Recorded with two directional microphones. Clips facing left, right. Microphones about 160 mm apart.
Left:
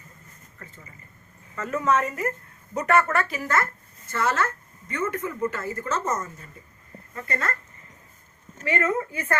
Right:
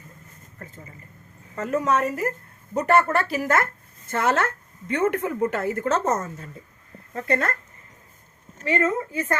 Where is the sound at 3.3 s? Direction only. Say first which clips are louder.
Right 4 dB; 45° right (ahead or behind).